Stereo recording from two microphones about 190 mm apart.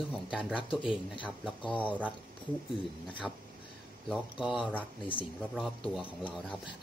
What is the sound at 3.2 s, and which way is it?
Speech, centre (ahead or behind).